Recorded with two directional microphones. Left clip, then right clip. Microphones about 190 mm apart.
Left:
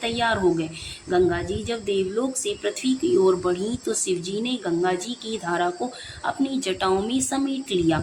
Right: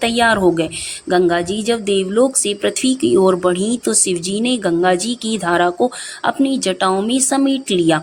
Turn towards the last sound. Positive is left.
turn(degrees=-45)  # may be behind; listen again after turning